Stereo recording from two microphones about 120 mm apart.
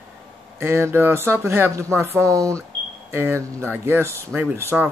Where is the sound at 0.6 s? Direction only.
20° right (ahead or behind).